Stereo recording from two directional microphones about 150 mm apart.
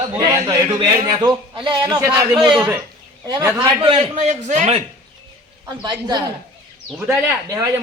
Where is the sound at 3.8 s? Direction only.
40° right (ahead or behind).